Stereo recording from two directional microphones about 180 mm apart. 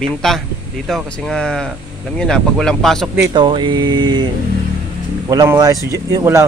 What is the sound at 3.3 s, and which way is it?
Speech, 25° right (ahead or behind).